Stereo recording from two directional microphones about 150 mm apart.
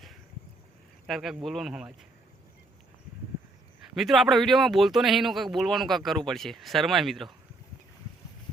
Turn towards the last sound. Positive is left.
turn(degrees=0)  # may be behind; listen again after turning